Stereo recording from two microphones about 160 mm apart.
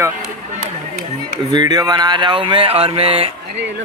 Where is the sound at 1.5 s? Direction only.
25° right (ahead or behind).